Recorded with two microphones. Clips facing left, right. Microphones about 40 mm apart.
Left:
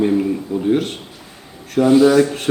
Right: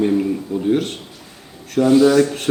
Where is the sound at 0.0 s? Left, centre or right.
Centre.